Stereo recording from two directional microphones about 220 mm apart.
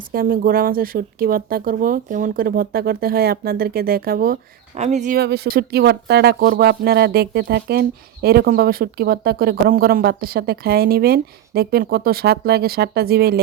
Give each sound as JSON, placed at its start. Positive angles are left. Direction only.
{"t": 0.1, "sound": "speech", "side_deg": -40}
{"t": 4.7, "sound": "speech", "side_deg": -30}